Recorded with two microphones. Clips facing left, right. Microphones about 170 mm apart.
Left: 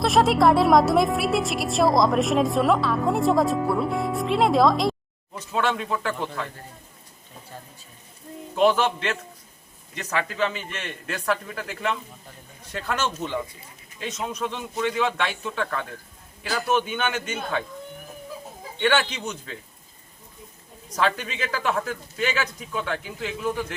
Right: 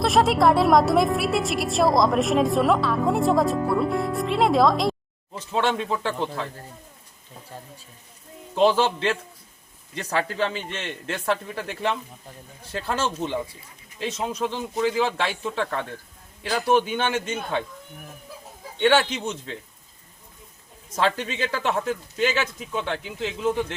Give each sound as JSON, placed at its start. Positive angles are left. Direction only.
{"t": 0.0, "sound": "a woman's voice", "side_deg": 0}
{"t": 5.3, "sound": "speech", "side_deg": -30}
{"t": 8.5, "sound": "speech", "side_deg": -30}
{"t": 18.8, "sound": "speech", "side_deg": -25}
{"t": 20.9, "sound": "speech", "side_deg": -25}